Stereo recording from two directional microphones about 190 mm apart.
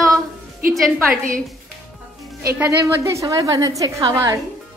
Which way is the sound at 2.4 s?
15° right (ahead or behind).